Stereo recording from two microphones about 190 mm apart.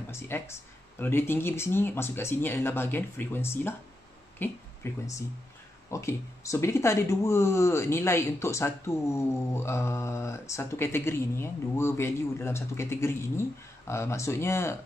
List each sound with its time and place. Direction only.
0.1 s speech: 15° left (ahead or behind)